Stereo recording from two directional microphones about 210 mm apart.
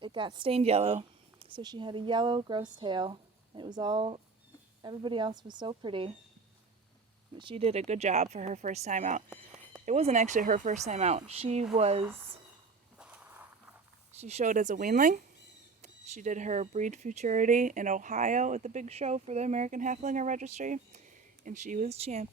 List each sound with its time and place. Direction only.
0.0 s a woman's voice: 20° right (ahead or behind)
7.3 s speech: 25° right (ahead or behind)
9.3 s a sound: 5° right (ahead or behind)
9.8 s speech: 30° right (ahead or behind)
13.0 s walk: 5° right (ahead or behind)
14.2 s speech: 30° right (ahead or behind)